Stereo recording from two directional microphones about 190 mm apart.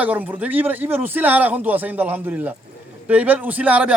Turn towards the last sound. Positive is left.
turn(degrees=-5)  # may be behind; listen again after turning